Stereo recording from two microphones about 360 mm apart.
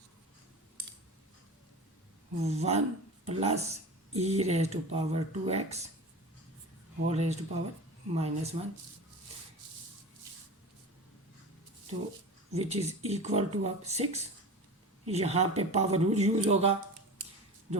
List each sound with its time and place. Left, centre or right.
2.4 s speech: centre
7.0 s speech: centre
12.5 s speech: centre